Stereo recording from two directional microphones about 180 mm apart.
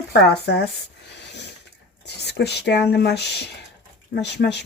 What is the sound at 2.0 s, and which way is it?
Speech, 70° left (ahead or behind).